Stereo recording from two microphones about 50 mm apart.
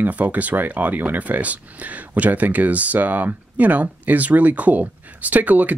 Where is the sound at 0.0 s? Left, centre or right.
Right.